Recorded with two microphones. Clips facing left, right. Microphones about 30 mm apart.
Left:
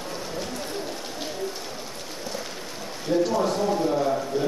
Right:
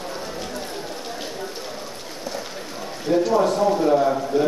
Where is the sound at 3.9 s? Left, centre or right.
Right.